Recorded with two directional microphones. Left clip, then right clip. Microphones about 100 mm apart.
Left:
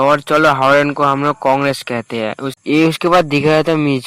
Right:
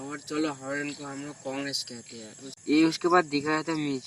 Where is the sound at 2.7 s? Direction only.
40° left (ahead or behind).